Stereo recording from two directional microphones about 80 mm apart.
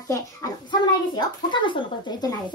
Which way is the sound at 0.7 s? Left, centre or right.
Left.